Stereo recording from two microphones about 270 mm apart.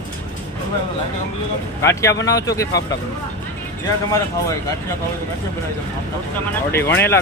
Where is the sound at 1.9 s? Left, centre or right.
Centre.